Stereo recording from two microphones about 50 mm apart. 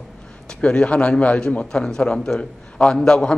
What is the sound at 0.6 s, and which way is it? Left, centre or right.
A man's voice, left.